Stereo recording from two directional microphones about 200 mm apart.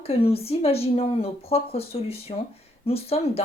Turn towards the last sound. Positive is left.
turn(degrees=30)  # may be behind; listen again after turning